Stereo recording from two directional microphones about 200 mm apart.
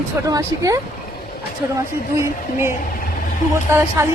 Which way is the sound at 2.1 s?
10° right (ahead or behind).